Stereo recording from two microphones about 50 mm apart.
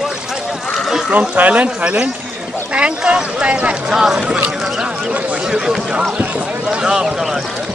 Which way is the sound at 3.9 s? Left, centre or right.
Centre.